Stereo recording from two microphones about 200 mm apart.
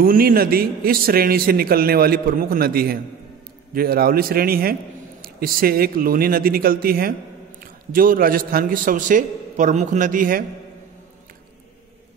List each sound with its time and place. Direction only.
0.0 s a man's voice: 45° right (ahead or behind)